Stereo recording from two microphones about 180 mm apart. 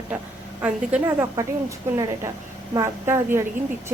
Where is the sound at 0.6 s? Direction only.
5° right (ahead or behind).